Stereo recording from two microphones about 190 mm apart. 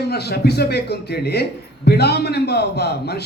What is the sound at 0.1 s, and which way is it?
A man's voice, 60° left (ahead or behind).